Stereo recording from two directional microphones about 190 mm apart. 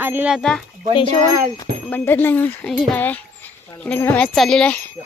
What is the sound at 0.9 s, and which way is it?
Speech, 25° left (ahead or behind).